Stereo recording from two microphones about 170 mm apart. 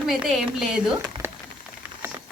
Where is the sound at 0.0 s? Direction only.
Centre (ahead or behind).